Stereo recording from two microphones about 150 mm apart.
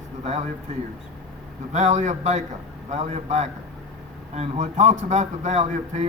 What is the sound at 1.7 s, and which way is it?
A man's voice, 50° right (ahead or behind).